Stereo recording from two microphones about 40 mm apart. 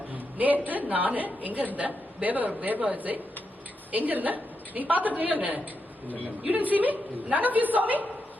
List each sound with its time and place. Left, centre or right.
0.1 s a woman's voice: right